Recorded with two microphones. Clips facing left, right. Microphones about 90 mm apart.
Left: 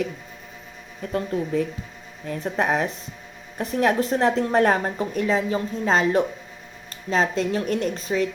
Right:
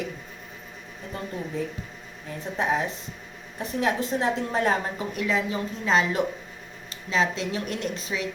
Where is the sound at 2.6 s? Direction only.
60° left (ahead or behind).